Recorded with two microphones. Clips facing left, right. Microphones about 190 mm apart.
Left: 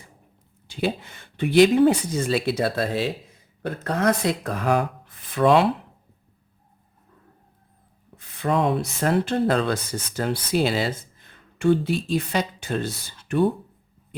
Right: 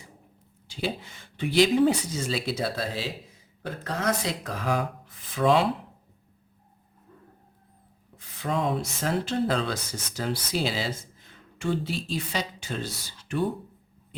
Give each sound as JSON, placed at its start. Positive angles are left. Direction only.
{"t": 0.7, "sound": "speech", "side_deg": 60}
{"t": 8.4, "sound": "speech", "side_deg": 65}